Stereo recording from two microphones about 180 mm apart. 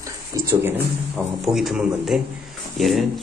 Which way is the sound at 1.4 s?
Centre (ahead or behind).